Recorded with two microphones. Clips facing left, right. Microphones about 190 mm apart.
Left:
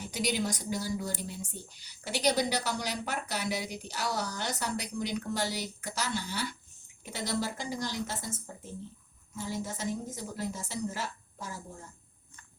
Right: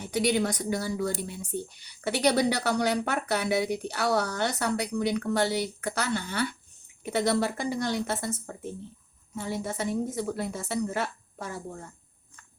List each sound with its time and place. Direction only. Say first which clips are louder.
0.1 s a woman's voice: right 7 dB; 60° right (ahead or behind)